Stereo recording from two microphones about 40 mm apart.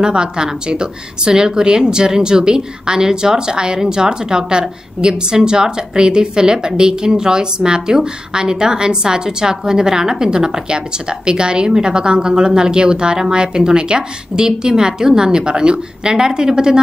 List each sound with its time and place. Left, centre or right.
0.0 s a woman's voice: right